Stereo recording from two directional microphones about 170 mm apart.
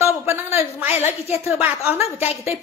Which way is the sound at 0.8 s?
40° left (ahead or behind).